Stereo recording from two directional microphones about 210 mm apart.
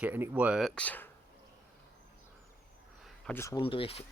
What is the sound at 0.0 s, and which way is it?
Speech, 10° right (ahead or behind).